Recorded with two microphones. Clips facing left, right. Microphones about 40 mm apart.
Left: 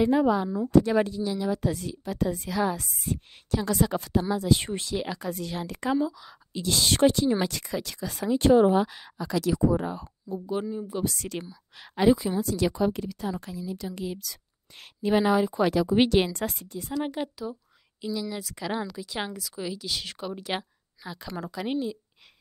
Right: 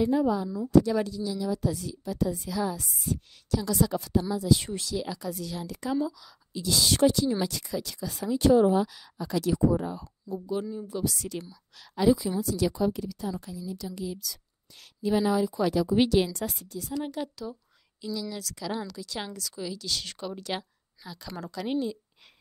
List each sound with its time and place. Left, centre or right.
0.0 s a woman's voice: left
0.5 s a woman's voice: left
5.9 s a woman's voice: left
6.5 s a woman's voice: left
9.2 s speech: left
10.5 s a woman's voice: left
11.0 s a woman's voice: left
21.3 s a woman's voice: centre